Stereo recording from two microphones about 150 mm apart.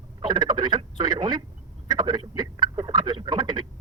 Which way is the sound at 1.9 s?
30° right (ahead or behind).